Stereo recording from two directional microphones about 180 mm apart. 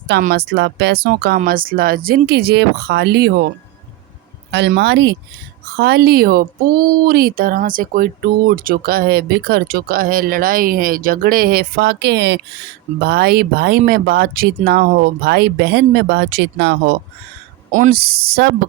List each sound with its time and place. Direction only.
0.2 s speech: 55° right (ahead or behind)
4.5 s speech: 70° right (ahead or behind)
5.7 s speech: 60° right (ahead or behind)
13.0 s speech: 60° right (ahead or behind)
17.7 s speech: 45° right (ahead or behind); by 18.5 s 60° right (ahead or behind)